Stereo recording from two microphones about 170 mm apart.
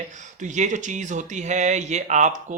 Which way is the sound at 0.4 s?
45° right (ahead or behind).